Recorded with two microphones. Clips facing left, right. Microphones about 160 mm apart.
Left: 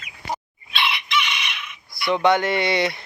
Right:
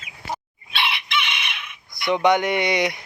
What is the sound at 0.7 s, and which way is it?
Chicken, 60° right (ahead or behind).